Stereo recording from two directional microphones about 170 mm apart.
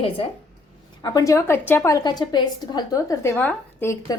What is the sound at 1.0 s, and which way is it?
A woman's voice, 20° left (ahead or behind).